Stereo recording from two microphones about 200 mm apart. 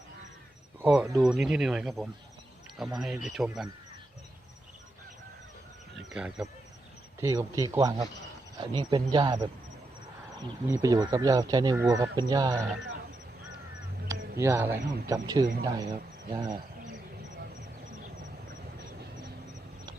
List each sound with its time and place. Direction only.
0.8 s speech: 5° right (ahead or behind)
6.1 s speech: 5° right (ahead or behind)
7.2 s speech: 15° right (ahead or behind)
10.8 s speech: 20° right (ahead or behind)
14.3 s speech: 10° right (ahead or behind)